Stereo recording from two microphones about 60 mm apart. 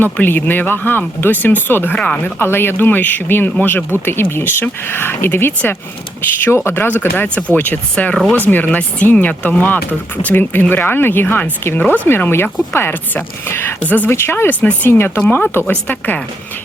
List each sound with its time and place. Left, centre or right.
0.0 s speech: left
2.0 s speech: left
2.4 s speech: left
13.8 s speech: left
14.1 s speech: left
14.6 s speech: left
14.8 s speech: left
15.5 s speech: left